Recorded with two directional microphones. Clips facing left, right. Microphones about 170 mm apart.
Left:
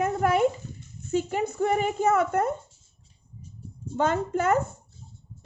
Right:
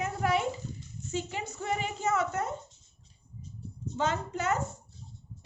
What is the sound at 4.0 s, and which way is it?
Speech, 50° left (ahead or behind).